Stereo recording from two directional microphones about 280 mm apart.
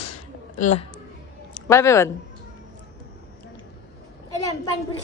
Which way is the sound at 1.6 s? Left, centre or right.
Centre.